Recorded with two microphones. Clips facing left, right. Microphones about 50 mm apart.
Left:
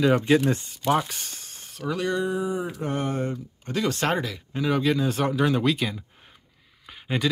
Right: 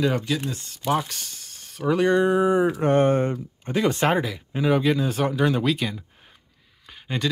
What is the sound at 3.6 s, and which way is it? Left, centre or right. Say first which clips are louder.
Speech: right 4 dB; right.